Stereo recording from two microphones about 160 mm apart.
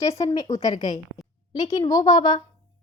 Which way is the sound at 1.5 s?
25° left (ahead or behind).